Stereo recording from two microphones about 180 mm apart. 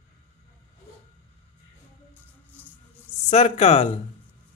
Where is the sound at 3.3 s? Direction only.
35° left (ahead or behind).